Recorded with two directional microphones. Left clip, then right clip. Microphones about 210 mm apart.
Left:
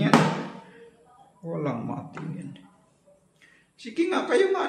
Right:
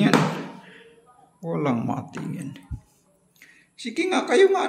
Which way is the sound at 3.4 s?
40° right (ahead or behind).